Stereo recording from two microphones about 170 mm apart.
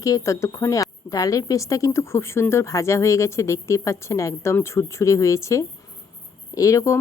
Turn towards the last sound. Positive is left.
turn(degrees=20)  # may be behind; listen again after turning